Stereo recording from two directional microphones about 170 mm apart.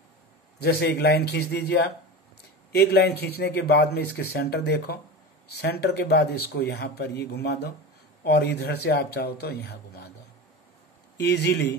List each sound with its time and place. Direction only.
0.6 s speech: 65° left (ahead or behind)
2.9 s speech: 70° left (ahead or behind)
11.1 s speech: 75° left (ahead or behind)